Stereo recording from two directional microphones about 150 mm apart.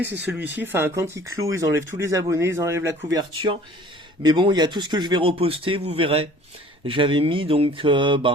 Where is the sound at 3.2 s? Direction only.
30° right (ahead or behind).